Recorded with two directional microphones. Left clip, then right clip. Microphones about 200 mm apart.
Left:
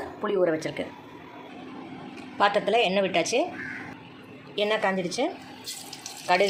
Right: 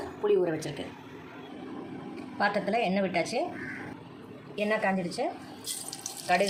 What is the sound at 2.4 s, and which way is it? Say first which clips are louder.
A woman's voice: left 6 dB; 20° left (ahead or behind).